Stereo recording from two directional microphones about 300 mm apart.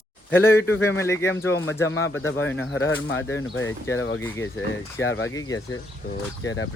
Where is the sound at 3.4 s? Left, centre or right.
Left.